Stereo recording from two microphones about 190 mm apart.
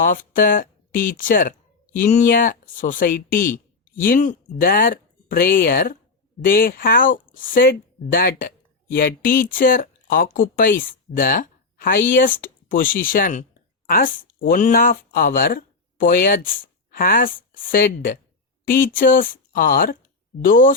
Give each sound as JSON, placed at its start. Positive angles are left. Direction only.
{"t": 0.0, "sound": "speech", "side_deg": 45}